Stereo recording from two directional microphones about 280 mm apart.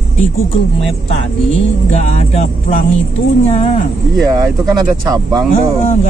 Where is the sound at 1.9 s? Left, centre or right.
Left.